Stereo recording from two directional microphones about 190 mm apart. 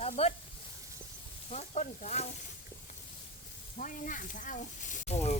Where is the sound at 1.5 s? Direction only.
35° left (ahead or behind).